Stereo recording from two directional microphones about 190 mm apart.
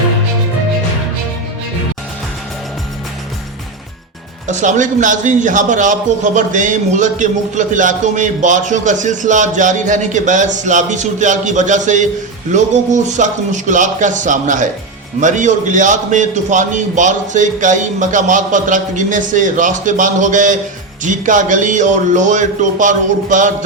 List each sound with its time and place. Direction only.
4.4 s a man's voice: 40° right (ahead or behind)